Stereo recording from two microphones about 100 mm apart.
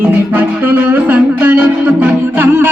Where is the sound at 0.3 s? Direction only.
20° right (ahead or behind).